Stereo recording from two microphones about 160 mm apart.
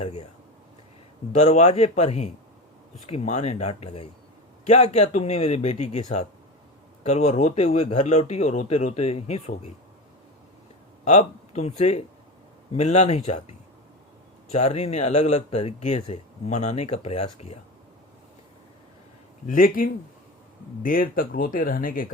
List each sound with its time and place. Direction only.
0.0 s speech: 40° left (ahead or behind)
1.4 s speech: 45° left (ahead or behind)
11.0 s speech: 45° left (ahead or behind)
19.5 s speech: 60° left (ahead or behind)